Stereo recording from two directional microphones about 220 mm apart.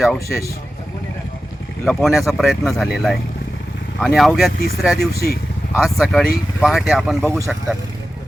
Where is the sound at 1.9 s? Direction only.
Centre (ahead or behind).